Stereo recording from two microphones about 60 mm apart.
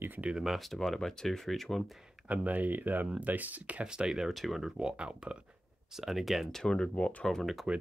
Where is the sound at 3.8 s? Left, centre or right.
Centre.